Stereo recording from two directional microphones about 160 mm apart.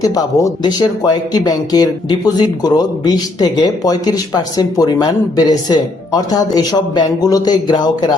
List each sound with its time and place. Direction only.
0.0 s speech: 25° left (ahead or behind)